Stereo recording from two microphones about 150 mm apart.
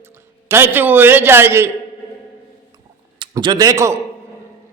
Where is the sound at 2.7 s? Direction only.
30° right (ahead or behind).